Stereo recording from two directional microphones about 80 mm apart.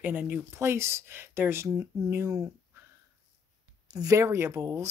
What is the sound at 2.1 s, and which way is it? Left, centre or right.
Speech, right.